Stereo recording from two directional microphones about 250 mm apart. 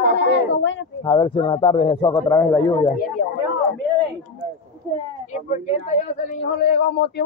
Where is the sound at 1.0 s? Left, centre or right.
Centre.